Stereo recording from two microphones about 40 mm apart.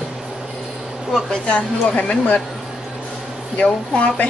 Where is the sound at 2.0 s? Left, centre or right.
Left.